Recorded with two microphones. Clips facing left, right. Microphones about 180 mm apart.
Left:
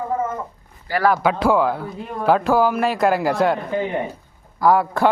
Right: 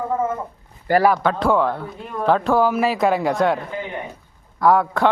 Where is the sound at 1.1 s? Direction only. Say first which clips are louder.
Left 1 dB; 5° left (ahead or behind).